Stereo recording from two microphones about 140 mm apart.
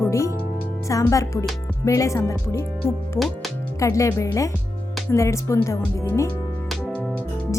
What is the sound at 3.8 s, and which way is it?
Speech, 20° left (ahead or behind).